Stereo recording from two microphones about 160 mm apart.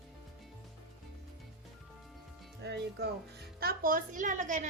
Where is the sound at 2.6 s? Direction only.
85° right.